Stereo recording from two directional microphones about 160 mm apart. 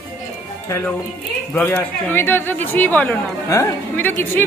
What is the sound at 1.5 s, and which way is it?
Speech, 15° left (ahead or behind).